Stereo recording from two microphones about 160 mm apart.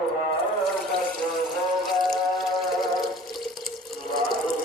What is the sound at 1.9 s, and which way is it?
Music, centre (ahead or behind).